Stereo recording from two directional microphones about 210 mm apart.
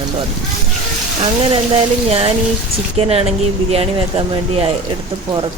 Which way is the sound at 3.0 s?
30° right (ahead or behind).